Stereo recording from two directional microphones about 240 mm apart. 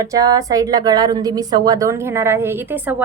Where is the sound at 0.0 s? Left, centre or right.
Centre.